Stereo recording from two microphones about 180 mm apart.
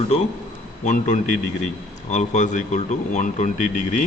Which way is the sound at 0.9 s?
40° left (ahead or behind).